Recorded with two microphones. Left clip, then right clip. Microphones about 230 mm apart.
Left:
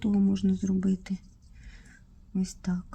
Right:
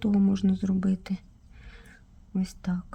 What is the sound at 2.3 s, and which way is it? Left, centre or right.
Speech, centre.